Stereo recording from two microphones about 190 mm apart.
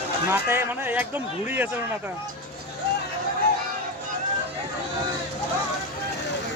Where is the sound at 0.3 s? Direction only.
15° right (ahead or behind).